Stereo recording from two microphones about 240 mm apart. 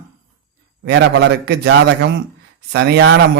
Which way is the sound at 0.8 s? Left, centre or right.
Right.